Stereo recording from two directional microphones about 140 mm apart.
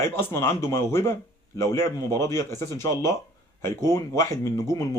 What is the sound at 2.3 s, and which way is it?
Speech, 20° left (ahead or behind).